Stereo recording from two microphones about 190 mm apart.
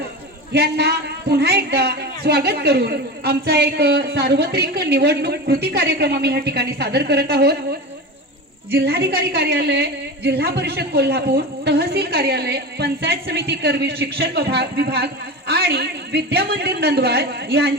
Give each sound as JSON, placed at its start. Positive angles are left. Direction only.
{"t": 0.5, "sound": "a woman's voice", "side_deg": -60}